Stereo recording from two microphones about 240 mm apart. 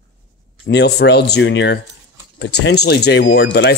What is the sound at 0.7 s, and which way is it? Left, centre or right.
Speech, left.